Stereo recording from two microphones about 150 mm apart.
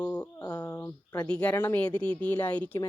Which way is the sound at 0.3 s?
25° left (ahead or behind).